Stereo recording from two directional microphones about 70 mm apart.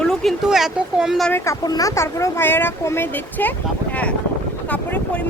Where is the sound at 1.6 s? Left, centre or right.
Left.